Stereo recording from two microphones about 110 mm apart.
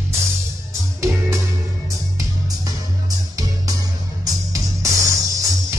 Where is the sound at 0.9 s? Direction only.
30° right (ahead or behind).